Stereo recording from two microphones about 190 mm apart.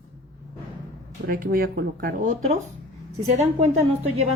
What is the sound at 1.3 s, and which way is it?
A woman's voice, 50° right (ahead or behind).